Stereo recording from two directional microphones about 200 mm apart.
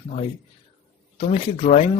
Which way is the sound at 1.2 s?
30° left (ahead or behind).